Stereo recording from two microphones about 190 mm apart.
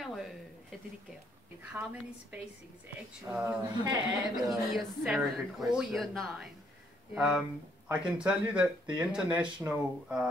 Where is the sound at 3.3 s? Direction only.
5° right (ahead or behind).